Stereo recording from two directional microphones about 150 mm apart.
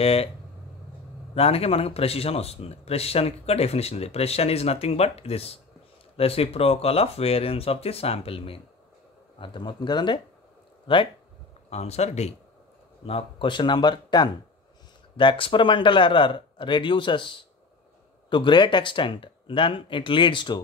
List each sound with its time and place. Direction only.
0.0 s speech: 40° left (ahead or behind)
1.3 s speech: 40° left (ahead or behind)
11.7 s speech: 45° left (ahead or behind)
13.0 s speech: 35° left (ahead or behind)